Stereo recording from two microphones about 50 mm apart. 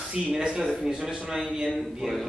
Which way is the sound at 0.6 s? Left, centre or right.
Centre.